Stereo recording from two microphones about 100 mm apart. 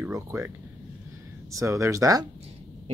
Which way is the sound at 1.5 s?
30° right (ahead or behind).